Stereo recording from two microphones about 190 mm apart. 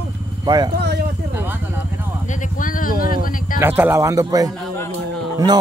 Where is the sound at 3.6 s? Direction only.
10° right (ahead or behind).